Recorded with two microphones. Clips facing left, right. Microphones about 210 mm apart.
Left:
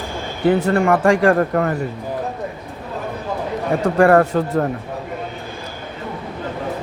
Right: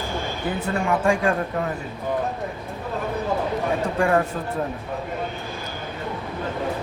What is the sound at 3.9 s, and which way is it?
Speech, 65° left (ahead or behind).